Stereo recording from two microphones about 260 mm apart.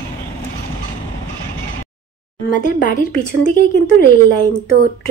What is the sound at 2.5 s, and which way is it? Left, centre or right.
A woman's voice, left.